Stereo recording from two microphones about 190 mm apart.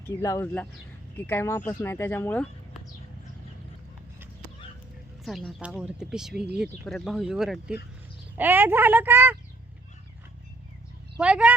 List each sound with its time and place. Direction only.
0.1 s speech: 15° left (ahead or behind)
5.2 s a woman's voice: centre (ahead or behind)
11.2 s a woman's voice: 5° right (ahead or behind)